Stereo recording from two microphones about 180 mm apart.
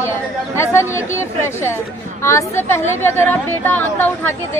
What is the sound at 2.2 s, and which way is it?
Speech, 15° left (ahead or behind).